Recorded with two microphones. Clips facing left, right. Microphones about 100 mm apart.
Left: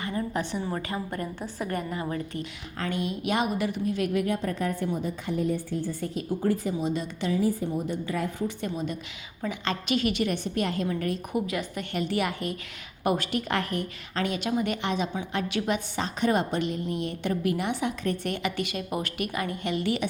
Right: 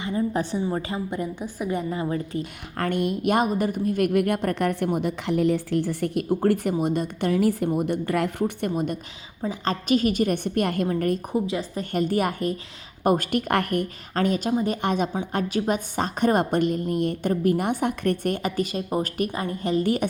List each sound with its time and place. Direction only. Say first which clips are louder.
0.3 s a woman's voice: right 4 dB; 30° right (ahead or behind); by 1.7 s 10° right (ahead or behind)
1.7 s a woman's voice: right 5 dB; 25° right (ahead or behind)
2.4 s a woman's voice: right 5 dB; 55° right (ahead or behind)
9.4 s a woman's voice: right 4 dB; 35° right (ahead or behind)
11.3 s a woman's voice: right 3 dB; 25° right (ahead or behind)
14.8 s a woman's voice: right 4 dB; 50° right (ahead or behind)